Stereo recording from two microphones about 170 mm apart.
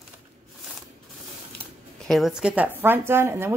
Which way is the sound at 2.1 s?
Centre (ahead or behind).